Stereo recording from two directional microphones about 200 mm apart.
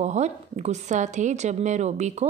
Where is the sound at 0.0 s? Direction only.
35° right (ahead or behind).